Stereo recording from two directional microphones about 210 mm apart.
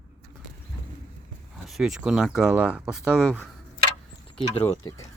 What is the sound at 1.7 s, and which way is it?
Speech, centre (ahead or behind).